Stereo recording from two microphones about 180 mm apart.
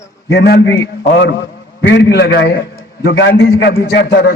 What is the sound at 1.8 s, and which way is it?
A man's voice, 75° left (ahead or behind).